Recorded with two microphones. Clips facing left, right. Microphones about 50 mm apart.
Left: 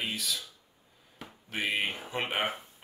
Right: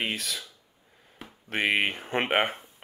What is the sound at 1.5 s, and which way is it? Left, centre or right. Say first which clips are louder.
Speech: right 6 dB; right.